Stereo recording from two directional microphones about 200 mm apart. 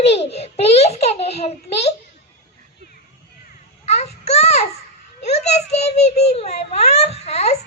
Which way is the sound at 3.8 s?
30° left (ahead or behind).